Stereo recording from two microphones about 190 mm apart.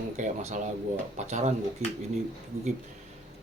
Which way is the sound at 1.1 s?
35° right (ahead or behind).